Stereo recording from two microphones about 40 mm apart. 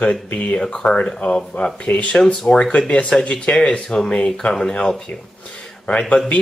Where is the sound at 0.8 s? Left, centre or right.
Centre.